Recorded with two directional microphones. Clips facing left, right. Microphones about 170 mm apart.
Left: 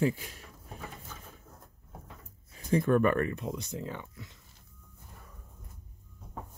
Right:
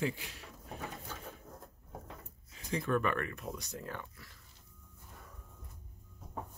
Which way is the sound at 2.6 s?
50° left (ahead or behind).